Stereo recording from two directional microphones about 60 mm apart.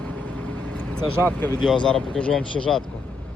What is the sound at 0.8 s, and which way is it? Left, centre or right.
Vehicle, left.